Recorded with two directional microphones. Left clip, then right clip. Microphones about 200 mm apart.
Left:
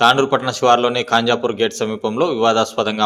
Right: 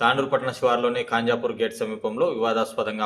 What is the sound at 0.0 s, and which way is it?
A man's voice, 45° left (ahead or behind).